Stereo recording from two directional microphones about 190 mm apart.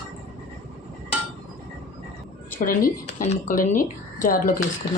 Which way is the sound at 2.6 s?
45° left (ahead or behind).